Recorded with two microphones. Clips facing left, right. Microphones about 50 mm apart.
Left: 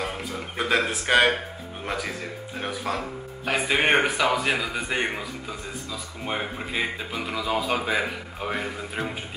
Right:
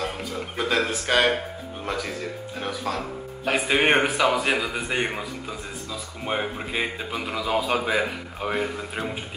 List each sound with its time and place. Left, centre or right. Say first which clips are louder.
0.0 s speech: right 1 dB; centre
3.4 s a man's voice: right 1 dB; centre
6.2 s a man's voice: right 2 dB; centre